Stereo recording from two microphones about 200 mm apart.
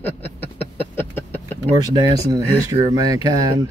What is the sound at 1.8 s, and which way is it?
Speech, 20° right (ahead or behind).